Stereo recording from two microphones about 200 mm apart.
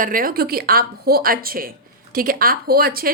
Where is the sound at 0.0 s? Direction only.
45° right (ahead or behind).